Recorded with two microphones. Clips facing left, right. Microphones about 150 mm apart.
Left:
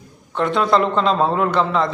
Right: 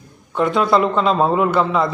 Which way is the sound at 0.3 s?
5° right (ahead or behind).